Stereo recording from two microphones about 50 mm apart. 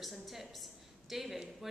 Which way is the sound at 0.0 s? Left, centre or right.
Centre.